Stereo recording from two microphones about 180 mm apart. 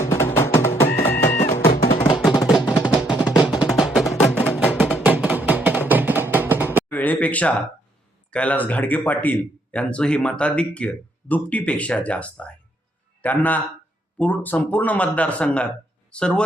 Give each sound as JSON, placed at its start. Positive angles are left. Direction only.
{"t": 0.0, "sound": "music", "side_deg": 15}
{"t": 1.4, "sound": "music", "side_deg": 40}
{"t": 1.6, "sound": "music", "side_deg": 60}
{"t": 2.1, "sound": "music", "side_deg": 0}
{"t": 6.9, "sound": "a man's voice", "side_deg": 10}